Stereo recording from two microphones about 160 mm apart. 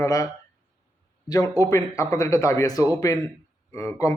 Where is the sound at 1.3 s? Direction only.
20° left (ahead or behind).